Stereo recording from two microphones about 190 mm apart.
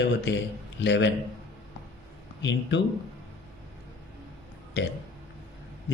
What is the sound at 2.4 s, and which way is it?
Speech, 70° left (ahead or behind).